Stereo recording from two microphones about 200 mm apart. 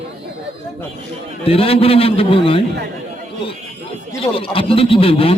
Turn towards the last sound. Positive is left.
turn(degrees=30)  # may be behind; listen again after turning